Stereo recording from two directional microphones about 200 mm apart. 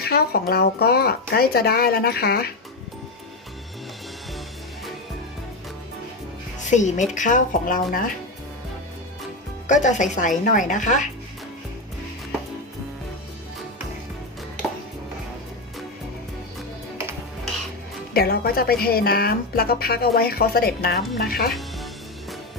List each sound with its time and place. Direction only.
0.0 s a woman's voice: 50° left (ahead or behind)
6.7 s speech: 35° left (ahead or behind)
9.6 s speech: 40° left (ahead or behind)
18.1 s a woman's voice: 50° left (ahead or behind)